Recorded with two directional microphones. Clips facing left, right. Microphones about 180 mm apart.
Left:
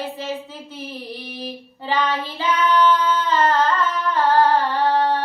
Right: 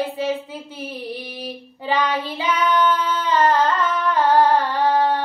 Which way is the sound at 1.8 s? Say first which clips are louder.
Right 1 dB; 15° right (ahead or behind).